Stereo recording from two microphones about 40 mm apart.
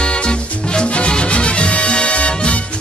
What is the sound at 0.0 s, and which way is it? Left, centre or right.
Music, left.